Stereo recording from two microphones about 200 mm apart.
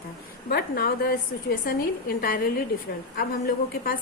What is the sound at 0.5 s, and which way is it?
A woman's voice, 50° left (ahead or behind).